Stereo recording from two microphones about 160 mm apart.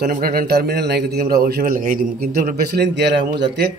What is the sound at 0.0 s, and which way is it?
A man's voice, 70° right (ahead or behind).